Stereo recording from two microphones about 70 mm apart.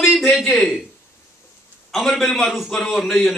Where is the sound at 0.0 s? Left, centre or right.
Centre.